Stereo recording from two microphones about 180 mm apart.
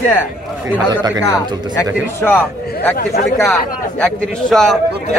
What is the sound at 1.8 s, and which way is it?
A man's voice, 15° left (ahead or behind).